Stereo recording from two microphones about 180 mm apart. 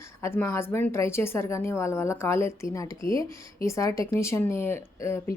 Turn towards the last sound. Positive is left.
turn(degrees=15)  # may be behind; listen again after turning